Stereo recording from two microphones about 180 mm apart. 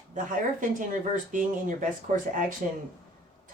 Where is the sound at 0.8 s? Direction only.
45° right (ahead or behind).